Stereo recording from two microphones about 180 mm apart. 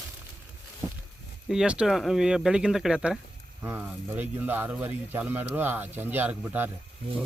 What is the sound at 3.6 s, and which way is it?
Speech, 15° right (ahead or behind).